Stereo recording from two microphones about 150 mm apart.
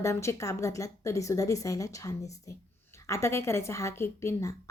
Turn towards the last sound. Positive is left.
turn(degrees=20)  # may be behind; listen again after turning